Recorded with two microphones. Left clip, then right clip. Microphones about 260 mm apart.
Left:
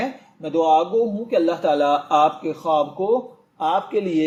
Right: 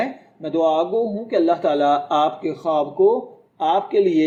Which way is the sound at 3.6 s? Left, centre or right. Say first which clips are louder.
Right 3 dB; centre.